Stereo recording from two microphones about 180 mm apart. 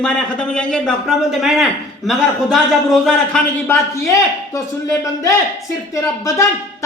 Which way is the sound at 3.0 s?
5° left (ahead or behind).